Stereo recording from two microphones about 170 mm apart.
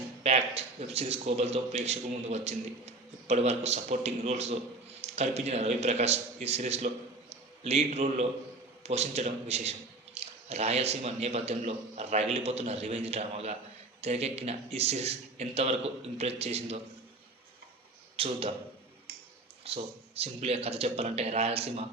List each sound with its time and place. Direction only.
0.2 s a man's voice: 35° right (ahead or behind)
18.2 s a man's voice: 35° right (ahead or behind)
19.6 s a man's voice: 35° right (ahead or behind)